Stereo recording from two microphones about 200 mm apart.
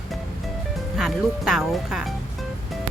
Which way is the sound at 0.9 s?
Centre (ahead or behind).